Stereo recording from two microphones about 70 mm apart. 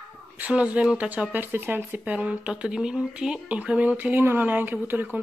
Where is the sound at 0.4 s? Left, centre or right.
Centre.